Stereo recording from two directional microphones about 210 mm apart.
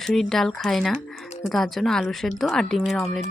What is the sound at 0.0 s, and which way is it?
Speech, centre (ahead or behind).